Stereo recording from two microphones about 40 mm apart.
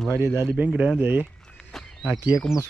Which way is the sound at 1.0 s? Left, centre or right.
Right.